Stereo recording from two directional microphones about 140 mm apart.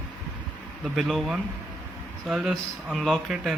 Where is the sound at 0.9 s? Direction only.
Centre (ahead or behind).